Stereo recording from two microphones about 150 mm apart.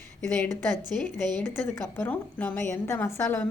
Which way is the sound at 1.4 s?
15° left (ahead or behind).